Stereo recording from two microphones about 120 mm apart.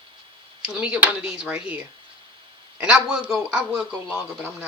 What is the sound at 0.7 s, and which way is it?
Speech, 10° right (ahead or behind).